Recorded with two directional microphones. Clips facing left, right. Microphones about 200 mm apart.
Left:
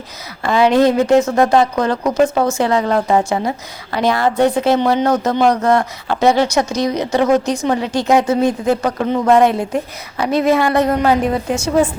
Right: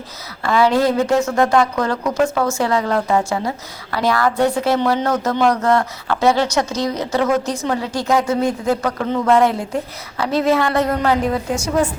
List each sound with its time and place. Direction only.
0.4 s a woman's voice: 20° left (ahead or behind)